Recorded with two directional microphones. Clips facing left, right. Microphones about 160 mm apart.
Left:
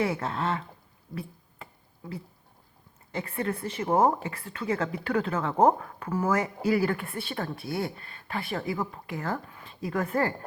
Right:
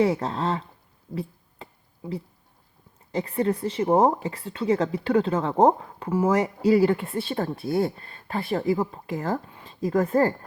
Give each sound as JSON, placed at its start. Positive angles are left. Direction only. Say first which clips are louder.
{"t": 0.0, "sound": "speech", "louder": "right 5 dB", "side_deg": -35}
{"t": 1.1, "sound": "a sound", "louder": "right 6 dB", "side_deg": -30}
{"t": 3.6, "sound": "speech", "louder": "right 3 dB", "side_deg": -30}